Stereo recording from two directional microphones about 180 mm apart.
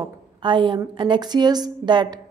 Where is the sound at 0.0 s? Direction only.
25° right (ahead or behind).